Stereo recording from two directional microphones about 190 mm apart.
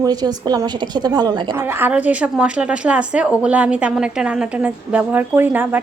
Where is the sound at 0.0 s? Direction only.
20° right (ahead or behind).